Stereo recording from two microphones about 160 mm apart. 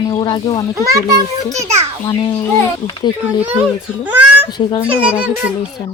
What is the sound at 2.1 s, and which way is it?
A child's voice, 30° left (ahead or behind).